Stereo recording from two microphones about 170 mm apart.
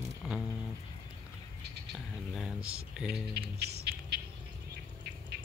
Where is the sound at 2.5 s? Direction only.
35° right (ahead or behind).